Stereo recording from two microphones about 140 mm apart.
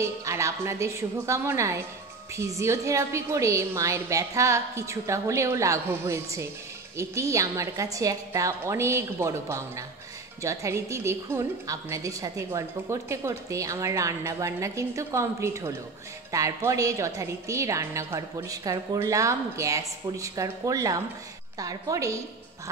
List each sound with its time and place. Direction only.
0.0 s a woman's voice: 20° right (ahead or behind)